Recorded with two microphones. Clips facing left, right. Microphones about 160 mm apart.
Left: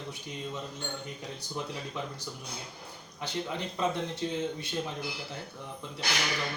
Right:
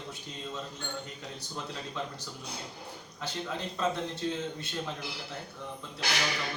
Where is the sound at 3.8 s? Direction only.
15° left (ahead or behind).